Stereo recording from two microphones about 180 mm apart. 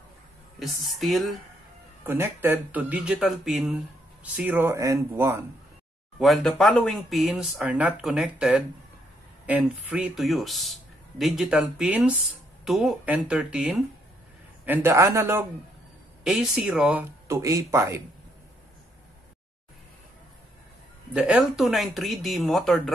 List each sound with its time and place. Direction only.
0.6 s speech: centre (ahead or behind)
2.0 s speech: 10° right (ahead or behind)
6.1 s speech: centre (ahead or behind)
17.3 s speech: 15° right (ahead or behind)
21.1 s speech: 5° right (ahead or behind)